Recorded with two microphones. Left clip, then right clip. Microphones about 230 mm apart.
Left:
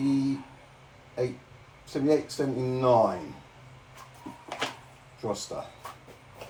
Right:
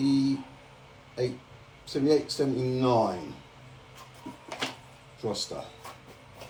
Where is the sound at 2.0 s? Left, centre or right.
Centre.